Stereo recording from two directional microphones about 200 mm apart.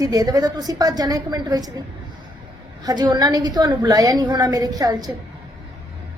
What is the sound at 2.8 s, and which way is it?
A woman's voice, 20° right (ahead or behind).